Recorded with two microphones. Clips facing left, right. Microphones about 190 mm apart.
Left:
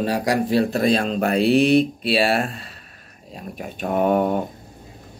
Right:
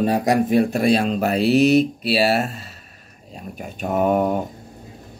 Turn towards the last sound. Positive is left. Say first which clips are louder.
# even
turn(degrees=-5)  # may be behind; listen again after turning